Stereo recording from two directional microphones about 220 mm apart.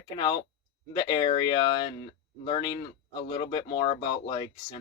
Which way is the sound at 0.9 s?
20° left (ahead or behind).